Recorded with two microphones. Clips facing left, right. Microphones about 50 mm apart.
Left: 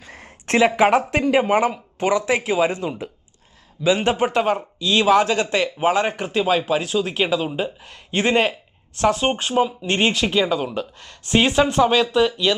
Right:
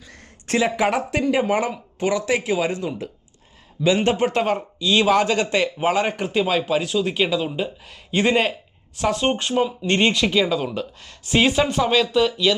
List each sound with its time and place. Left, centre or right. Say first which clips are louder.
0.0 s a sound: left 5 dB; left
1.2 s speech: left 3 dB; left
3.8 s speech: even; centre
9.1 s speech: even; centre
9.6 s speech: left 1 dB; centre